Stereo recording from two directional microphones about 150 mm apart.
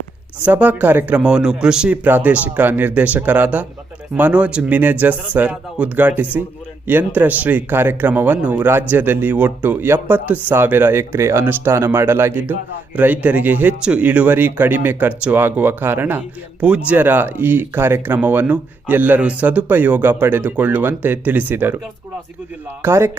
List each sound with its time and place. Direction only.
0.4 s speech: 10° right (ahead or behind)
22.8 s speech: 15° right (ahead or behind)